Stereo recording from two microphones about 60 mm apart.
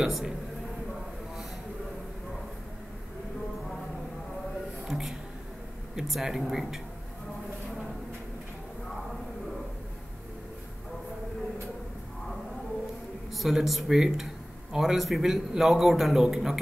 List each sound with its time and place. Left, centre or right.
0.0 s a man's voice: centre
4.8 s speech: centre
13.3 s speech: centre